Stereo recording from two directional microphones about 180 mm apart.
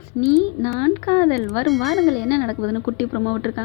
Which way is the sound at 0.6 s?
15° left (ahead or behind).